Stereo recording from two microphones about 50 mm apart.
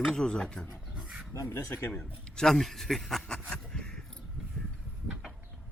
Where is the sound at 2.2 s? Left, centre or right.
Centre.